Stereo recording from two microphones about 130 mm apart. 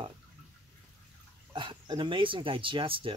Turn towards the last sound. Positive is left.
turn(degrees=-45)  # may be behind; listen again after turning